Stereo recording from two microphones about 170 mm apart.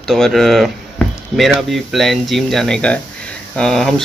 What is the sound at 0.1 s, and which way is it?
Speech, centre (ahead or behind).